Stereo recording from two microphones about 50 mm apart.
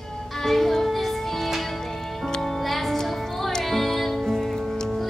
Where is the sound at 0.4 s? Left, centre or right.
Centre.